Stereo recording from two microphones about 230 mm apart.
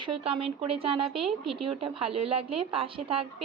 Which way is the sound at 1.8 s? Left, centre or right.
Right.